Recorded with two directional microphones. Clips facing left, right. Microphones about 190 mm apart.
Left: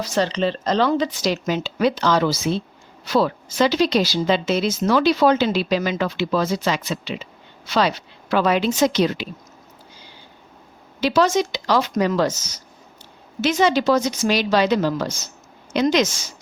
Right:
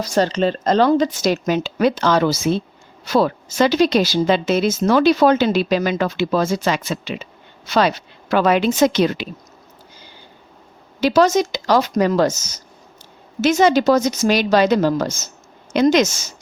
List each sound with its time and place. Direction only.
0.0 s speech: 40° right (ahead or behind)
11.0 s speech: 45° right (ahead or behind)